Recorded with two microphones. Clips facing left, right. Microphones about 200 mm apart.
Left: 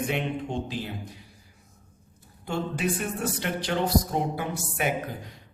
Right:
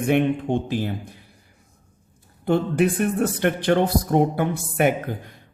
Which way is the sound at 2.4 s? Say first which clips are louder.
Right 9 dB; 55° right (ahead or behind).